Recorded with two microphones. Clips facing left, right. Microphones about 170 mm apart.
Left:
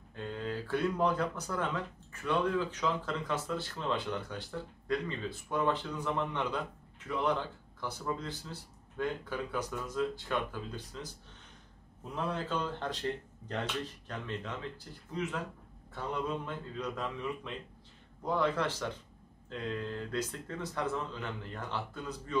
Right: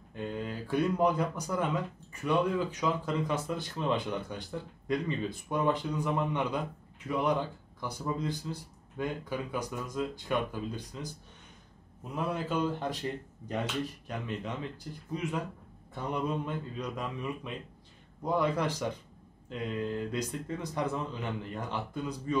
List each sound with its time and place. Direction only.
0.1 s speech: 15° right (ahead or behind)
12.3 s speech: 10° right (ahead or behind)